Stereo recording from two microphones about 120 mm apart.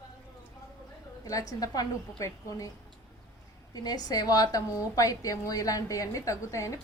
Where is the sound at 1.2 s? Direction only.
30° left (ahead or behind).